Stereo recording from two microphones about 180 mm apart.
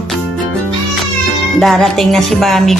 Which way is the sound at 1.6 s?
Centre (ahead or behind).